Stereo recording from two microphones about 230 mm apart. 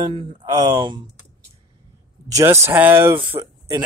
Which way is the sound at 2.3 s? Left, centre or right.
Centre.